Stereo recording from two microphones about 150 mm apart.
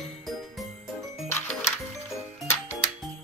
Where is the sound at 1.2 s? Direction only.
15° left (ahead or behind).